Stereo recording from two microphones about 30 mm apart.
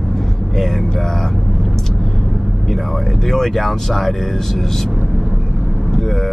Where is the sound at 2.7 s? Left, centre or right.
Centre.